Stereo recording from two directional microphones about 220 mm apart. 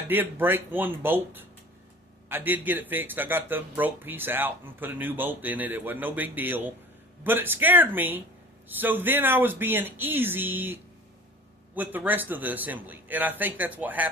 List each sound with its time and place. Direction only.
0.1 s speech: 10° right (ahead or behind)